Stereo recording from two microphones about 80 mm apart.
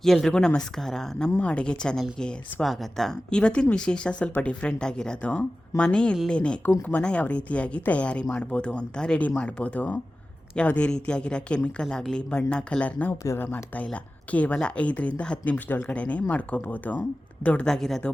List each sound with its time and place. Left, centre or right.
0.0 s speech: centre
17.7 s speech: centre